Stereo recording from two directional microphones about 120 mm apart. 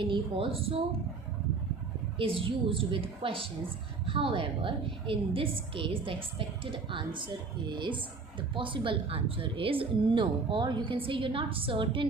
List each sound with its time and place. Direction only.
0.0 s speech: 50° right (ahead or behind)
2.1 s speech: 45° right (ahead or behind)